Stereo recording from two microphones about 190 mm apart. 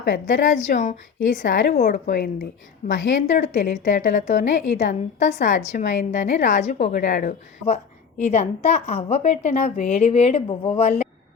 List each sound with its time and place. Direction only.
0.0 s a woman's voice: 45° left (ahead or behind)